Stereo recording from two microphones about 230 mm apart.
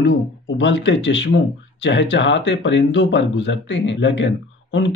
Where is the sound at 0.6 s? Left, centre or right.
Left.